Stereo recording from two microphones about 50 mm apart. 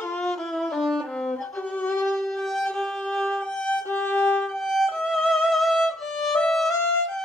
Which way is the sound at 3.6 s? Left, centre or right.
Left.